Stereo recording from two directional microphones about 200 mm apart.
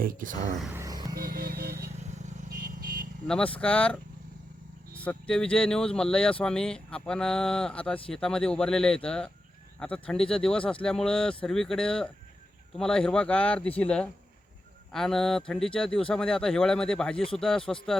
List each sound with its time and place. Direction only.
0.0 s speech: 45° right (ahead or behind)
0.6 s a sound: 10° right (ahead or behind)
1.2 s music: 50° right (ahead or behind)
2.0 s vehicle: 35° right (ahead or behind)
3.2 s speech: 5° left (ahead or behind)